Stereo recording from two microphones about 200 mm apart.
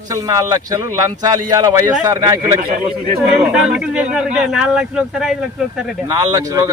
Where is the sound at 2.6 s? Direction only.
45° right (ahead or behind).